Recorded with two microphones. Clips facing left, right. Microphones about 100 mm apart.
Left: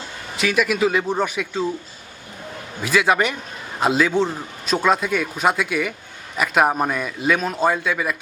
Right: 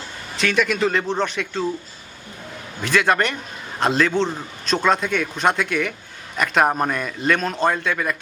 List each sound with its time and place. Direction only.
0.3 s a man's voice: 5° left (ahead or behind)
2.8 s a man's voice: 5° left (ahead or behind)